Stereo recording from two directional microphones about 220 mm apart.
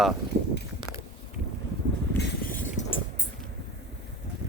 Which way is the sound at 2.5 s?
35° left (ahead or behind).